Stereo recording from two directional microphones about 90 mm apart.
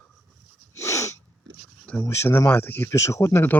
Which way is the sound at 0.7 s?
35° left (ahead or behind).